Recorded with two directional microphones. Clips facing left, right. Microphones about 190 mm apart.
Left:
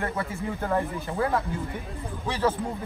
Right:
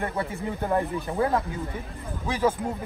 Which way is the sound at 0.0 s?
15° right (ahead or behind).